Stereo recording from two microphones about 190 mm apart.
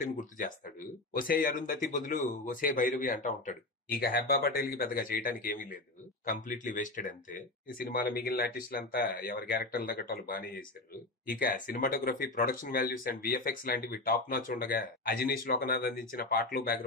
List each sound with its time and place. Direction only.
0.0 s speech: 45° left (ahead or behind)